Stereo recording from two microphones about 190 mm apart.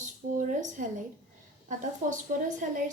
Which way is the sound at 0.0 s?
40° right (ahead or behind).